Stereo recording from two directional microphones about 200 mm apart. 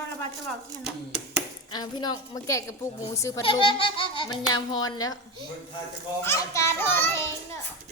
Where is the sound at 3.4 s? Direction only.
25° left (ahead or behind).